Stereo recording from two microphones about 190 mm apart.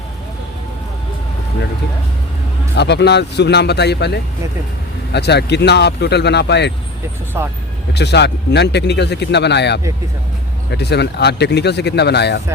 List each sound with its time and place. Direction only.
2.7 s speech: 65° left (ahead or behind)
7.3 s speech: 10° right (ahead or behind)
7.9 s speech: 60° left (ahead or behind)